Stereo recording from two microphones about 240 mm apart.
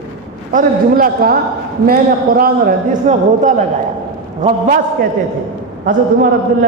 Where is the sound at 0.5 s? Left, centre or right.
Right.